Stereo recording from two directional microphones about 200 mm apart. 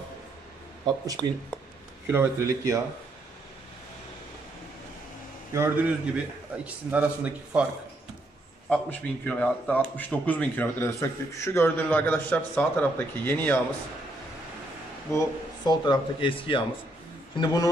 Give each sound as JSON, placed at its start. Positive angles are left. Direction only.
{"t": 0.8, "sound": "a man's voice", "side_deg": -20}
{"t": 5.5, "sound": "a man's voice", "side_deg": -10}
{"t": 8.6, "sound": "speech", "side_deg": 5}
{"t": 15.1, "sound": "speech", "side_deg": 20}